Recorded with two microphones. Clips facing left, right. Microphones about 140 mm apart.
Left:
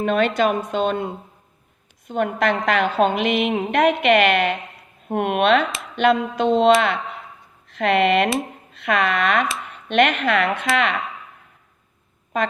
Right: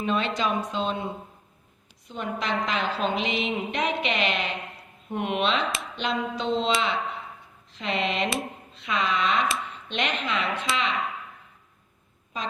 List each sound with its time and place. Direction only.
0.0 s a woman's voice: 60° left (ahead or behind)
7.7 s a woman's voice: 60° left (ahead or behind)
12.3 s a woman's voice: 60° left (ahead or behind)